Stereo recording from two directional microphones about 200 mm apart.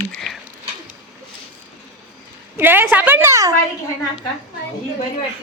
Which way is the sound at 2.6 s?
10° right (ahead or behind).